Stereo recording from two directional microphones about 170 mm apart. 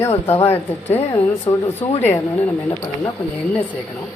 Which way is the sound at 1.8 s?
10° left (ahead or behind).